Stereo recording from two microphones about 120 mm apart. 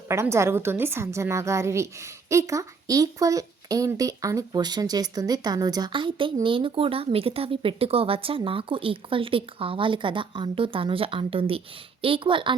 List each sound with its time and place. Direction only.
0.1 s a woman's voice: 25° right (ahead or behind); by 12.5 s 45° right (ahead or behind)